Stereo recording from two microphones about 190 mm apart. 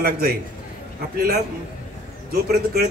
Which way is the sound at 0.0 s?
55° right (ahead or behind).